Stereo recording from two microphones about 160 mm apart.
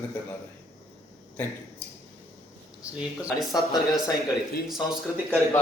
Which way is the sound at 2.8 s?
5° right (ahead or behind).